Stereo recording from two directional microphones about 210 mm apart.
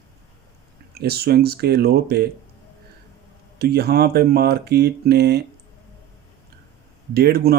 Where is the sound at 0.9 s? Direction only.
50° right (ahead or behind).